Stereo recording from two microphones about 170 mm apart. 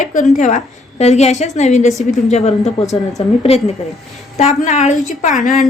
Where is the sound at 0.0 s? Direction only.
50° left (ahead or behind).